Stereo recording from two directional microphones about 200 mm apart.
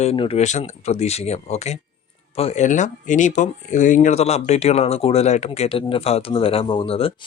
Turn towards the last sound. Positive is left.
turn(degrees=30)  # may be behind; listen again after turning